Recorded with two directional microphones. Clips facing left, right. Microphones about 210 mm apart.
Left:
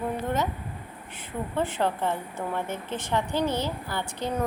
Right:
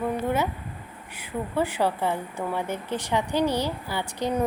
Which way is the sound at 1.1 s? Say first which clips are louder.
Right 2 dB; 10° right (ahead or behind).